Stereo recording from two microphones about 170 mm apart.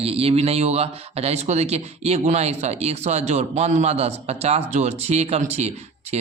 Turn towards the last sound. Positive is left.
turn(degrees=-40)  # may be behind; listen again after turning